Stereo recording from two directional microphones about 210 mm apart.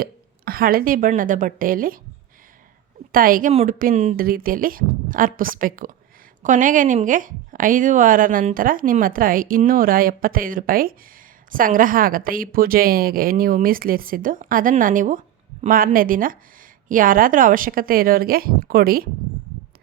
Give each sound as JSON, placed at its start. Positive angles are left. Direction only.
{"t": 0.0, "sound": "a woman's voice", "side_deg": -45}
{"t": 3.1, "sound": "a woman's voice", "side_deg": -40}